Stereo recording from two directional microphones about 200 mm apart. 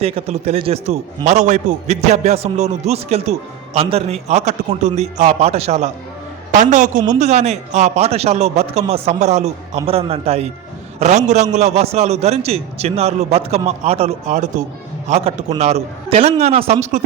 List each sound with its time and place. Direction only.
0.0 s a man's voice: 30° right (ahead or behind)